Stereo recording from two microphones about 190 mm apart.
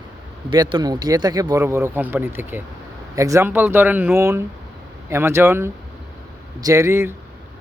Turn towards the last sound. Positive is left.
turn(degrees=-15)  # may be behind; listen again after turning